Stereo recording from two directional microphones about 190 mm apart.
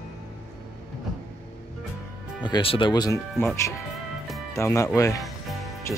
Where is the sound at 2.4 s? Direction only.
25° left (ahead or behind).